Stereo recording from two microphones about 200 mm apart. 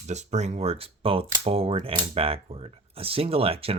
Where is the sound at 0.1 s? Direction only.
35° right (ahead or behind).